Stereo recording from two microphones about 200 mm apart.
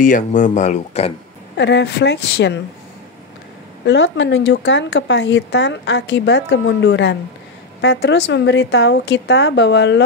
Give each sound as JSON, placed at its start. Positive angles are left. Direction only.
{"t": 0.0, "sound": "speech", "side_deg": 40}
{"t": 1.6, "sound": "speech", "side_deg": 60}
{"t": 3.8, "sound": "speech", "side_deg": 65}